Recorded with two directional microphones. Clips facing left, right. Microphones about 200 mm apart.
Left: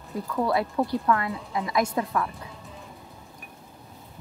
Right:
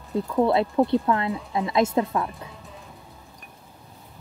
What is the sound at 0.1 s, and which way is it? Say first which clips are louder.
A woman's voice: right 5 dB; 25° right (ahead or behind).